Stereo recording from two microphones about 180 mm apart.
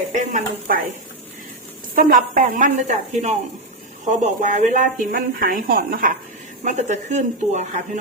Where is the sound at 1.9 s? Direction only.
50° right (ahead or behind).